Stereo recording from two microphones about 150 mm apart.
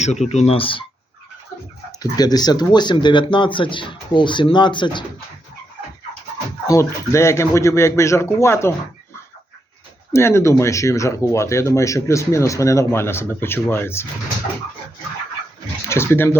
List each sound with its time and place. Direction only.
0.0 s speech: 50° left (ahead or behind)
2.0 s speech: 25° left (ahead or behind)
6.7 s speech: 20° left (ahead or behind)
10.1 s speech: 20° left (ahead or behind)
15.9 s speech: 15° left (ahead or behind)